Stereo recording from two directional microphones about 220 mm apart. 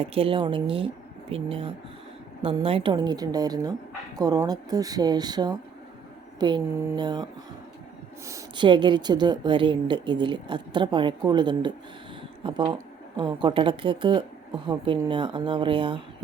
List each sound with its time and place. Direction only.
0.0 s a woman's voice: 25° right (ahead or behind)
8.3 s a woman's voice: 15° right (ahead or behind)